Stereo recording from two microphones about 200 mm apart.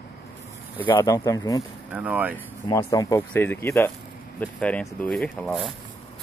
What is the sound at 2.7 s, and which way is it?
Speech, 15° left (ahead or behind).